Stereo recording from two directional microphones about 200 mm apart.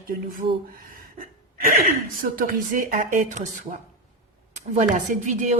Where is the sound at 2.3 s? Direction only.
45° right (ahead or behind).